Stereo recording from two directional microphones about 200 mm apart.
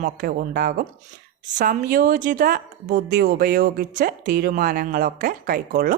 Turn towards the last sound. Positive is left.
turn(degrees=-45)  # may be behind; listen again after turning